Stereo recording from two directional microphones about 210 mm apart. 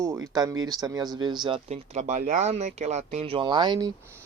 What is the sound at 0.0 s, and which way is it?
Speech, 15° right (ahead or behind).